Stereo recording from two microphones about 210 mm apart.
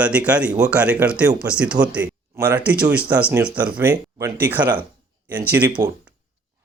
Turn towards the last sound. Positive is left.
turn(degrees=-15)  # may be behind; listen again after turning